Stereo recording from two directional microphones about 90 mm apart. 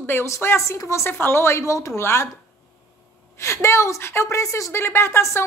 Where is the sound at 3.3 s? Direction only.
30° left (ahead or behind).